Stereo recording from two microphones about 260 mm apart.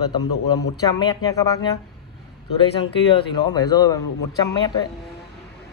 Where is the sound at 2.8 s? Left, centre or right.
Centre.